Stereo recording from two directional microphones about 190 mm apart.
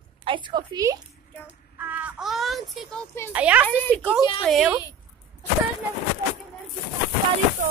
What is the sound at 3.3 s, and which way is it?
A woman's voice, 5° right (ahead or behind).